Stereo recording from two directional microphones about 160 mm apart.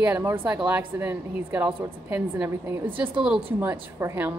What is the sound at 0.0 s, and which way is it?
A woman's voice, 15° right (ahead or behind).